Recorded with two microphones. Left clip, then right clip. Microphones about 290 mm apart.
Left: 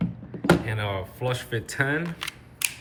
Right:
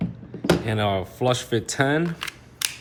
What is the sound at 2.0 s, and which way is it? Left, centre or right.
Camera, centre.